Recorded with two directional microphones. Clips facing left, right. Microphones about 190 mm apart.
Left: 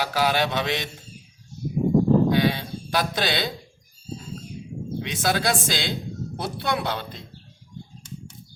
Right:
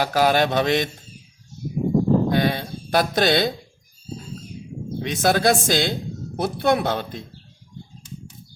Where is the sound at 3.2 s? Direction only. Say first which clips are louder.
Right 7 dB; 45° right (ahead or behind).